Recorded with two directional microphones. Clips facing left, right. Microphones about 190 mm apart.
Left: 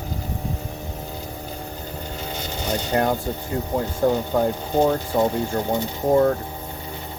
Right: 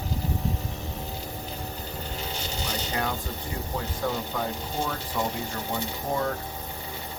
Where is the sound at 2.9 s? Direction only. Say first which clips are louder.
Left 12 dB; 50° left (ahead or behind).